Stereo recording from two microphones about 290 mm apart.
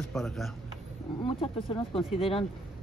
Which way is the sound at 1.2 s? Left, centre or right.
Centre.